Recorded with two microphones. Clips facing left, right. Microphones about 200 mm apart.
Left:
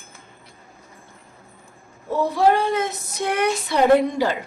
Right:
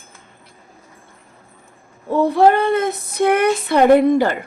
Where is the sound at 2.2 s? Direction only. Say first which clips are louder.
Right 4 dB; 60° right (ahead or behind).